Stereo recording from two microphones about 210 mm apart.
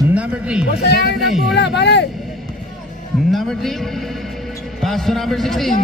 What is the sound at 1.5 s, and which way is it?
Speech, 55° left (ahead or behind).